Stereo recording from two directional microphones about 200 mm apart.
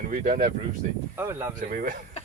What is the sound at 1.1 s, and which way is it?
Speech, 15° right (ahead or behind).